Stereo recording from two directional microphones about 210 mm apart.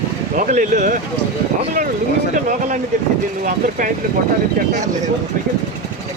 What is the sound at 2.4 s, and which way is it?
Speech, 35° right (ahead or behind).